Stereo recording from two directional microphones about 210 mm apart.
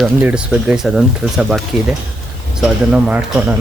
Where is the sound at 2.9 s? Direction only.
5° right (ahead or behind).